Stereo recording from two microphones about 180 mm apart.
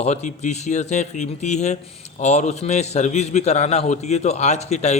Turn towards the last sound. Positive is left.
turn(degrees=40)  # may be behind; listen again after turning